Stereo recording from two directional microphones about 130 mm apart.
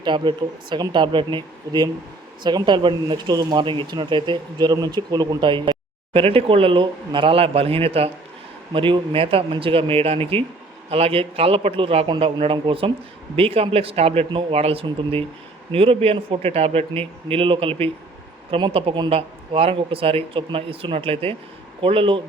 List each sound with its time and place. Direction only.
0.0 s speech: 35° right (ahead or behind)